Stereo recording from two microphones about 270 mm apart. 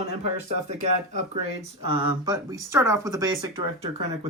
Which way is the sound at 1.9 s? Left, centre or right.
Centre.